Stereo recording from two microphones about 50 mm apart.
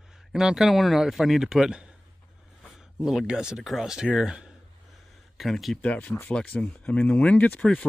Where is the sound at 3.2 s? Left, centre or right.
Centre.